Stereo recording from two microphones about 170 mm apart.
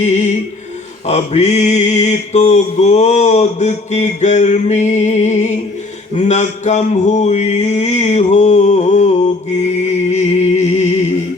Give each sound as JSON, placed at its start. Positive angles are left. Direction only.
{"t": 0.0, "sound": "mantra", "side_deg": 40}